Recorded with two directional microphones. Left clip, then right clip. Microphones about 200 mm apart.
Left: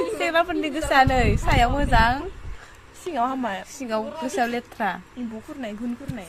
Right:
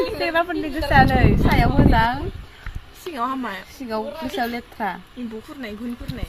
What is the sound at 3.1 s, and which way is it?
Speech, 50° left (ahead or behind).